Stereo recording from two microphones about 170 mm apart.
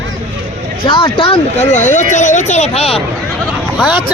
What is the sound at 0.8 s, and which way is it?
Speech, 30° left (ahead or behind).